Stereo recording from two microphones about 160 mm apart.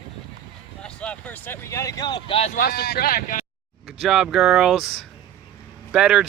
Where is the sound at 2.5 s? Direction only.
70° left (ahead or behind).